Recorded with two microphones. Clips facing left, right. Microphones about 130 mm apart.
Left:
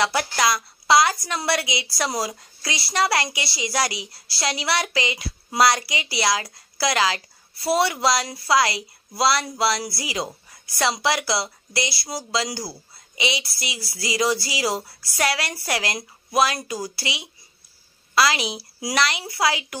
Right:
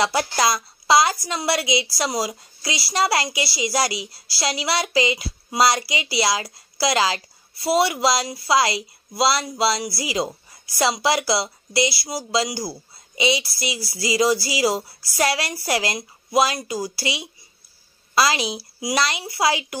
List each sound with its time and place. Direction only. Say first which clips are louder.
0.0 s speech: right 1 dB; 30° right (ahead or behind)
2.0 s speech: right 2 dB; 15° right (ahead or behind)
2.9 s speech: right 1 dB; 25° right (ahead or behind)
12.0 s speech: right 3 dB; 10° right (ahead or behind)
13.1 s a woman's voice: right 5 dB; 35° right (ahead or behind)
18.8 s speech: right 1 dB; 15° right (ahead or behind)
19.0 s speech: right 1 dB; 30° right (ahead or behind)